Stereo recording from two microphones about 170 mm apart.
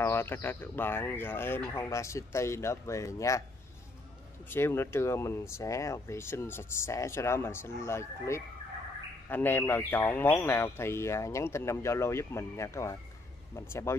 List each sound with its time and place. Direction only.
0.0 s speech: 15° left (ahead or behind)
4.5 s speech: 15° left (ahead or behind)